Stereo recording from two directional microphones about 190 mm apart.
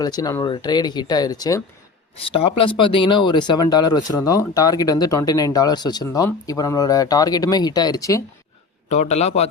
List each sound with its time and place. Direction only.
0.0 s speech: 20° left (ahead or behind)
2.1 s speech: 30° left (ahead or behind)
8.9 s a man's voice: 35° left (ahead or behind)